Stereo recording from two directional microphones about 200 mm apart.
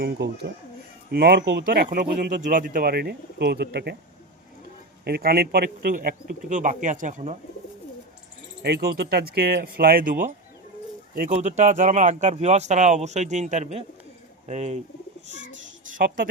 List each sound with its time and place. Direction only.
0.0 s speech: 55° right (ahead or behind)
5.0 s speech: 50° right (ahead or behind)
8.6 s speech: 55° right (ahead or behind); by 14.8 s 35° right (ahead or behind)
15.9 s a woman's voice: 40° right (ahead or behind)